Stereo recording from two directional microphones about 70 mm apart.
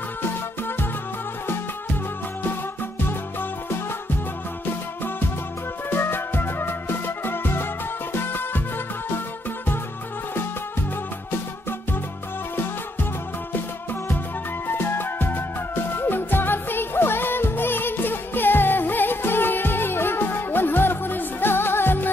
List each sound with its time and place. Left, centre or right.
5.9 s music: left
14.7 s music: left